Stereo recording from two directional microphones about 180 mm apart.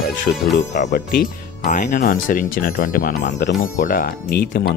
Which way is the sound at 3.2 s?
75° left (ahead or behind).